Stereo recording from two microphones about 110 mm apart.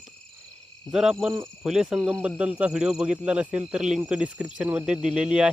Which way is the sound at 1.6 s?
5° right (ahead or behind).